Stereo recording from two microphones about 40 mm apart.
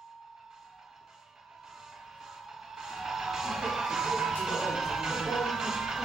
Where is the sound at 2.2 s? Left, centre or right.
Centre.